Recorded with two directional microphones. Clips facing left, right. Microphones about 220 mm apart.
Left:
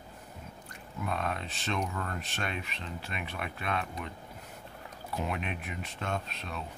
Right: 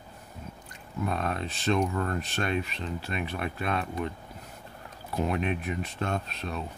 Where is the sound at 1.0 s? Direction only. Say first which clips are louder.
Right 4 dB; 40° right (ahead or behind).